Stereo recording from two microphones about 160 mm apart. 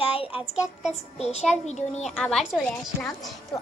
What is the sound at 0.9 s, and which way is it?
A child's voice, 40° left (ahead or behind).